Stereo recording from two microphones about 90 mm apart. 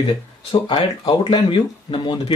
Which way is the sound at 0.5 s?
75° left (ahead or behind).